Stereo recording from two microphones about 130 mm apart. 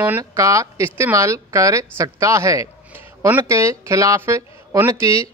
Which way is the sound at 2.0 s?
25° right (ahead or behind).